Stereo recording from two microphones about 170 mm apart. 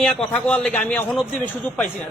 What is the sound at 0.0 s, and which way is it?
A man's voice, 5° left (ahead or behind).